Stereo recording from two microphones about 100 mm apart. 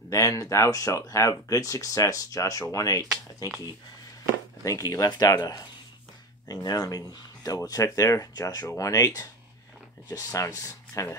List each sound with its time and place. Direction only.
0.1 s speech: 30° left (ahead or behind)
4.6 s speech: 35° left (ahead or behind)